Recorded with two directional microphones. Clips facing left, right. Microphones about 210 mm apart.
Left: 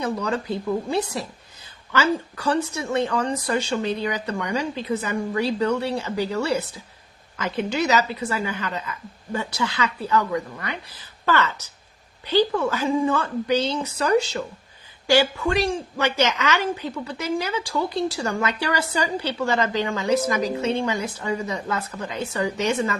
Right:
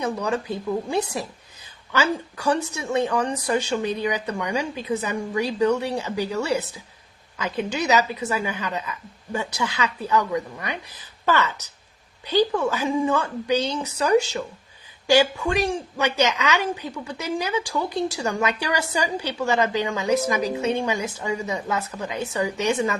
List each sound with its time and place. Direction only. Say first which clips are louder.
0.0 s a woman's voice: even; 15° right (ahead or behind)